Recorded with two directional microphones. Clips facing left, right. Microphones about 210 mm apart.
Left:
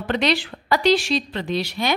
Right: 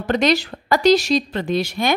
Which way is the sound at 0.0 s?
45° right (ahead or behind).